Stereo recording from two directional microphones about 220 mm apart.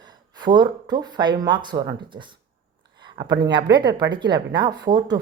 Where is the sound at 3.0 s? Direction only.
20° right (ahead or behind).